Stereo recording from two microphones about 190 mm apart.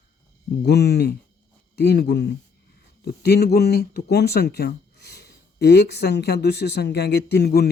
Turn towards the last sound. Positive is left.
turn(degrees=55)  # may be behind; listen again after turning